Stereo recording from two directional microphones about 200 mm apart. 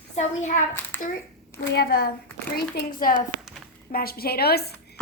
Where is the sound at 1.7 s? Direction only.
50° left (ahead or behind).